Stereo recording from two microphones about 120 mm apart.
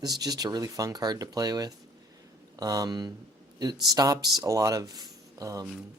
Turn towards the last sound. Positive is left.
turn(degrees=-30)  # may be behind; listen again after turning